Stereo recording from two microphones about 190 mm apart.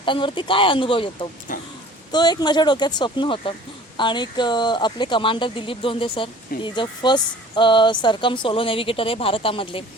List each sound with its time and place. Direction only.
0.0 s speech: 25° left (ahead or behind)
1.5 s speech: 45° left (ahead or behind)
2.1 s speech: 20° left (ahead or behind)